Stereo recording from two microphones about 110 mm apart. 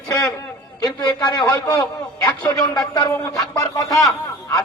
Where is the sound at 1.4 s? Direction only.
35° left (ahead or behind).